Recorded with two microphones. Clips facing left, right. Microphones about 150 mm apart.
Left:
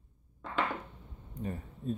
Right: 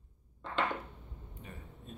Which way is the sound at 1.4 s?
40° left (ahead or behind).